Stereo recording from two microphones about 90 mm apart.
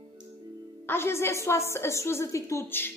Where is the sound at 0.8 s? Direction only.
25° left (ahead or behind).